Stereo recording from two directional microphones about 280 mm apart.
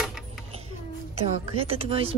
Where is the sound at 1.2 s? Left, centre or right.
Centre.